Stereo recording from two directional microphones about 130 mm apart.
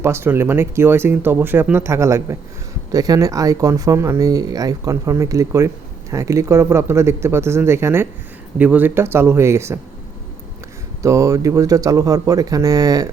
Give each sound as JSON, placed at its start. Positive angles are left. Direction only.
{"t": 0.0, "sound": "speech", "side_deg": -20}
{"t": 11.0, "sound": "speech", "side_deg": -25}